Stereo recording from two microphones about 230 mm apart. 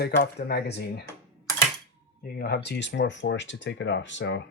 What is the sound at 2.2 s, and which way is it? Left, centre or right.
Speech, left.